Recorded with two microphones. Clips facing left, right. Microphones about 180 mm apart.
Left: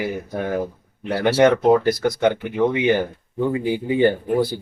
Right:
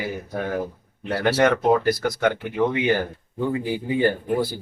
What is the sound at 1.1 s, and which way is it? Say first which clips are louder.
Speech: left 4 dB; centre (ahead or behind).